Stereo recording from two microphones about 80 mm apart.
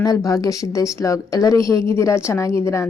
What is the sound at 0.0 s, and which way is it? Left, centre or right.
A woman's voice, left.